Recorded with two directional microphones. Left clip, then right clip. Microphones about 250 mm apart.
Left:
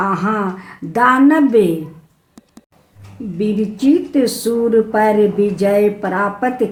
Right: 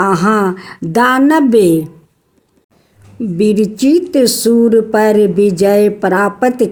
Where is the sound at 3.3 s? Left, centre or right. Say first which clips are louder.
Right 7 dB; right.